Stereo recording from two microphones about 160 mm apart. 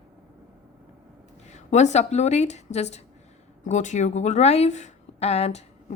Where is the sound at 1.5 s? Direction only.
45° left (ahead or behind).